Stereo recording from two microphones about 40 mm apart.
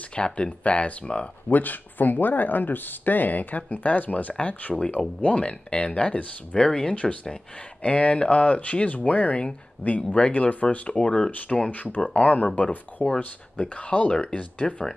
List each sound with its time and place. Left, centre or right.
0.1 s speech: left
1.5 s speech: left
4.4 s speech: left
7.8 s speech: left
11.0 s speech: left
12.6 s speech: left